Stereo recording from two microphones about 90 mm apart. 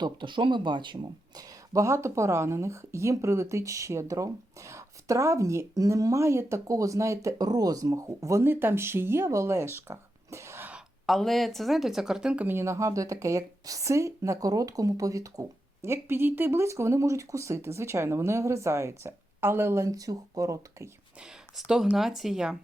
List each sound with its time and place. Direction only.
0.0 s speech: 60° right (ahead or behind)
1.7 s speech: 35° right (ahead or behind)
8.4 s speech: 25° right (ahead or behind)
11.0 s speech: centre (ahead or behind)
12.5 s speech: 30° right (ahead or behind)
21.9 s speech: 5° right (ahead or behind)